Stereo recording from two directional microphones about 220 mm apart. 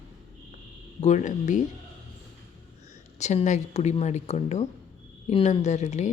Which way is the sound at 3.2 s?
30° left (ahead or behind).